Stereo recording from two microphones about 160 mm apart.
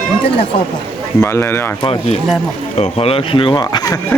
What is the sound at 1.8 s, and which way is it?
Speech, 35° left (ahead or behind).